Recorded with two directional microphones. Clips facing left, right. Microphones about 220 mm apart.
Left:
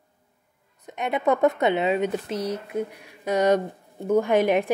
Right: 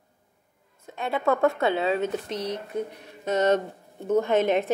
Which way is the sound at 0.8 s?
20° left (ahead or behind).